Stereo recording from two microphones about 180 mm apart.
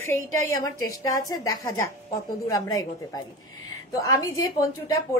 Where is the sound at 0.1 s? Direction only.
15° left (ahead or behind).